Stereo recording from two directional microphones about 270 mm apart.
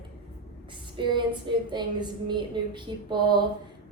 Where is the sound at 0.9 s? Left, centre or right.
Centre.